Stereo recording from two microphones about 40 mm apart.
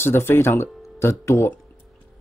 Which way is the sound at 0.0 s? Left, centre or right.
Left.